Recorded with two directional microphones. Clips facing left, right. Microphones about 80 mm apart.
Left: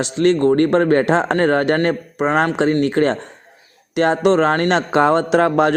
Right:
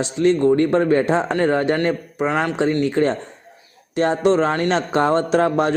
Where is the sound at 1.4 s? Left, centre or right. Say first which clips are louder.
Left 2 dB; left.